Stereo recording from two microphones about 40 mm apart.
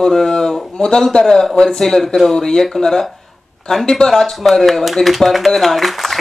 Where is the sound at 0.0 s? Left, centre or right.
Centre.